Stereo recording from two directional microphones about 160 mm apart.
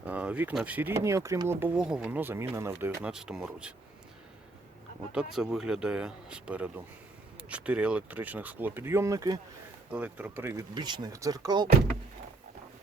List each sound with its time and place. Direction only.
0.0 s speech: 10° right (ahead or behind)
5.1 s speech: 5° right (ahead or behind); by 9.4 s 20° right (ahead or behind)
9.9 s speech: 10° right (ahead or behind)
10.6 s speech: 30° right (ahead or behind)